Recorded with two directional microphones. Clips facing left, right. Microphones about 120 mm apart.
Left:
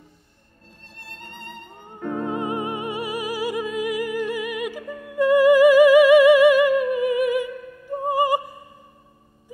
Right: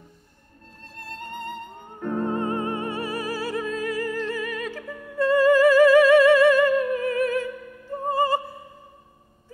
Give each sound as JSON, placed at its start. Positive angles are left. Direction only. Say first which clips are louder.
{"t": 0.8, "sound": "music", "louder": "right 6 dB", "side_deg": -45}
{"t": 2.0, "sound": "music", "louder": "even", "side_deg": 10}